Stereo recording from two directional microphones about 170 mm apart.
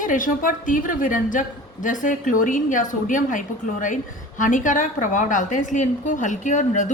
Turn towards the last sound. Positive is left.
turn(degrees=45)  # may be behind; listen again after turning